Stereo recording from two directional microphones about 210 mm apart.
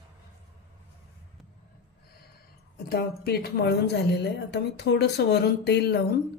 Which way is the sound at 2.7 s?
50° left (ahead or behind).